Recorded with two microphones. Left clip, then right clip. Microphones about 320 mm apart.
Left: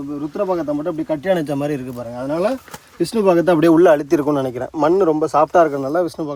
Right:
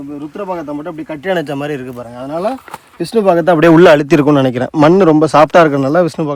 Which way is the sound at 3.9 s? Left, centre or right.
Right.